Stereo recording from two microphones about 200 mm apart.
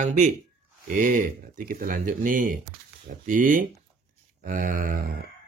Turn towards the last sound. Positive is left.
turn(degrees=-45)  # may be behind; listen again after turning